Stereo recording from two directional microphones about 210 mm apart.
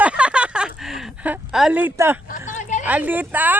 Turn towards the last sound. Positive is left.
turn(degrees=-10)  # may be behind; listen again after turning